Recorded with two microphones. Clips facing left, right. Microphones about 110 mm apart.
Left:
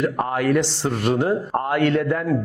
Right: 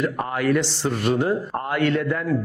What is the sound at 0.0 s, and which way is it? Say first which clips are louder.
Speech: left 2 dB; 45° left (ahead or behind).